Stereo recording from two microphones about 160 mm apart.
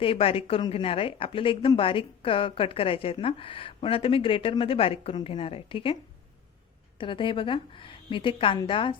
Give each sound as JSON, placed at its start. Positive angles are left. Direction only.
{"t": 0.0, "sound": "a woman's voice", "side_deg": 35}
{"t": 7.0, "sound": "a woman's voice", "side_deg": 30}